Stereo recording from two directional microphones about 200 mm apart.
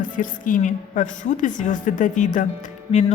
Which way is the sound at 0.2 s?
40° left (ahead or behind).